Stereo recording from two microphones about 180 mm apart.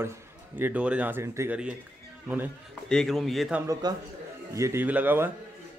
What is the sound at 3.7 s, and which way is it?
A man's voice, 20° right (ahead or behind).